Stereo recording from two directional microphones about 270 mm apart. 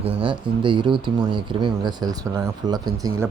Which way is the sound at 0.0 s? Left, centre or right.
Right.